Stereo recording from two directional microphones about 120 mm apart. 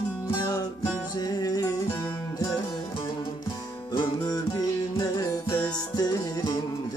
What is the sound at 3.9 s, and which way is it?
Music, 35° left (ahead or behind).